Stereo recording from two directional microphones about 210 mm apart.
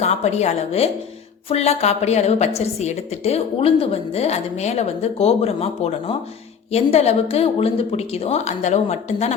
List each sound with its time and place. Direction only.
0.0 s a woman's voice: 30° left (ahead or behind)